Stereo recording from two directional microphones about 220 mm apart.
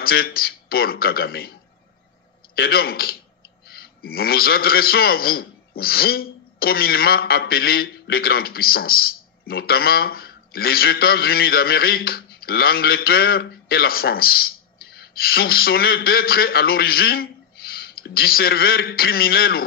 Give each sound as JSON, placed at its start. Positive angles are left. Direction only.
{"t": 0.0, "sound": "a man's voice", "side_deg": 45}
{"t": 2.5, "sound": "a man's voice", "side_deg": 45}